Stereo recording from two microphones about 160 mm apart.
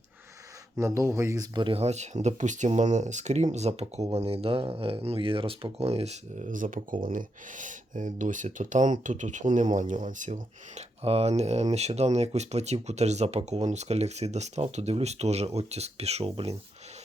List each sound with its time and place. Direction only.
0.8 s speech: 15° right (ahead or behind); by 16.6 s 40° right (ahead or behind)